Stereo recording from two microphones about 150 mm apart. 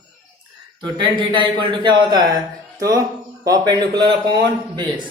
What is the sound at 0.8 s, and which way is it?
Speech, 30° right (ahead or behind).